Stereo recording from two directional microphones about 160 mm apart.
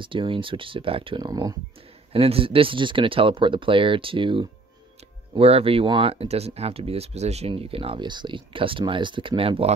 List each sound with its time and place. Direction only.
0.0 s speech: 30° right (ahead or behind)
2.1 s speech: 35° right (ahead or behind)